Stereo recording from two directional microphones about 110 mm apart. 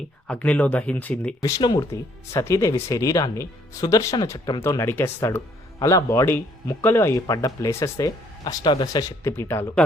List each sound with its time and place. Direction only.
0.3 s speech: 10° left (ahead or behind)
1.4 s speech: 35° left (ahead or behind)
4.6 s speech: 25° left (ahead or behind)
8.6 s speech: 45° left (ahead or behind)
9.2 s speech: 25° left (ahead or behind)